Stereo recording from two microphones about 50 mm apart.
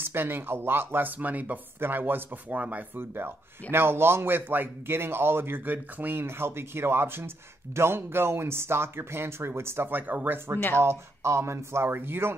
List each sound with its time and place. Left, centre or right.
0.0 s speech: right
4.4 s speech: right
6.2 s speech: right
9.8 s speech: right
10.8 s speech: right